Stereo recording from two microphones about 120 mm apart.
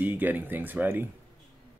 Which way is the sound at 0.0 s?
15° right (ahead or behind).